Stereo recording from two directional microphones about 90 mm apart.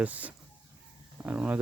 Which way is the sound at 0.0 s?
15° right (ahead or behind).